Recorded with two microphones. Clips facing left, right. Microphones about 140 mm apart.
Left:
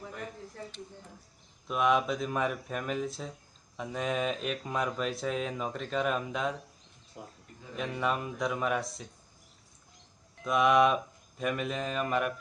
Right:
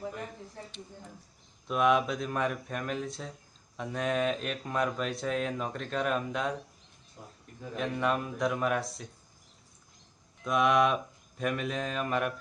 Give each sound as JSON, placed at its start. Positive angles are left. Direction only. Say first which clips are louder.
{"t": 1.6, "sound": "speech", "louder": "right 1 dB", "side_deg": 0}
{"t": 7.2, "sound": "speech", "louder": "left 4 dB", "side_deg": 90}
{"t": 7.8, "sound": "speech", "louder": "right 2 dB", "side_deg": 0}
{"t": 10.4, "sound": "speech", "louder": "left 1 dB", "side_deg": 0}